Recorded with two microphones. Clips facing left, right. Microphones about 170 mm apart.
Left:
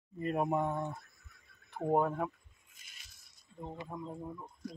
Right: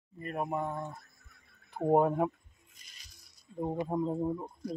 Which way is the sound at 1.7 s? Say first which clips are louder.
Right 5 dB; 30° right (ahead or behind).